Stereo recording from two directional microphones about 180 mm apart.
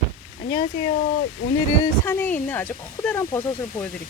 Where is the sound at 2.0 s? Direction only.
10° left (ahead or behind).